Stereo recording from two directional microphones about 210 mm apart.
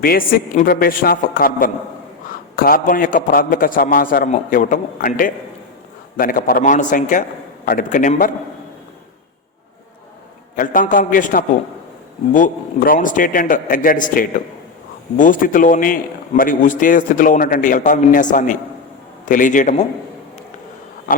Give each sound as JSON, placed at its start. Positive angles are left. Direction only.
{"t": 0.0, "sound": "a man's voice", "side_deg": 45}
{"t": 10.5, "sound": "a man's voice", "side_deg": 40}